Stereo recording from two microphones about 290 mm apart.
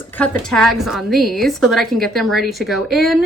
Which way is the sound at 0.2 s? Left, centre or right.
Centre.